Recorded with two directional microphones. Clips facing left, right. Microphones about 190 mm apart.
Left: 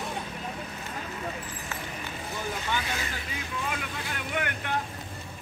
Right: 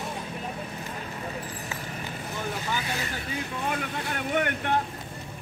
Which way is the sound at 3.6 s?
40° right (ahead or behind).